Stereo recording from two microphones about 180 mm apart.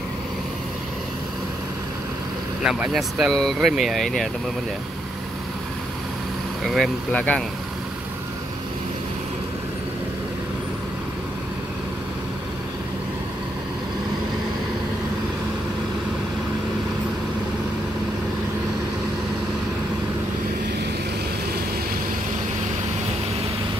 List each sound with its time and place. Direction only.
2.6 s speech: 5° right (ahead or behind)
6.7 s speech: 5° left (ahead or behind)